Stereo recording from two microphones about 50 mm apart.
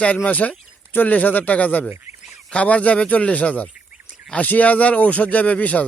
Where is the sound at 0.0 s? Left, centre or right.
Left.